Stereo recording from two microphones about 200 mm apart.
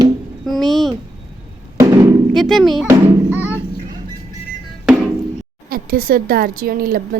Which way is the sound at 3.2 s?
10° right (ahead or behind).